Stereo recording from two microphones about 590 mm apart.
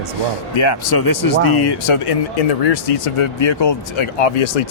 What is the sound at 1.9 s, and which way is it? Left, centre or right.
Speech, left.